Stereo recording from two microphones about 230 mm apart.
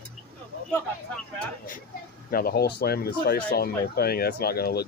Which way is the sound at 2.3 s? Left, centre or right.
Left.